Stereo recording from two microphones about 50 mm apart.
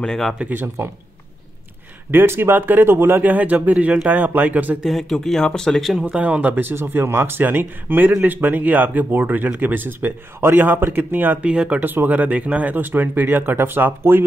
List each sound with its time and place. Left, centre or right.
0.4 s speech: right
2.0 s speech: right
2.5 s speech: right
3.2 s speech: right
5.1 s speech: centre
6.0 s speech: right
11.4 s speech: right
11.8 s speech: right
14.1 s speech: right